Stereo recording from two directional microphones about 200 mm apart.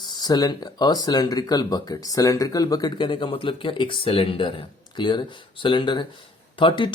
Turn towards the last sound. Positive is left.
turn(degrees=25)  # may be behind; listen again after turning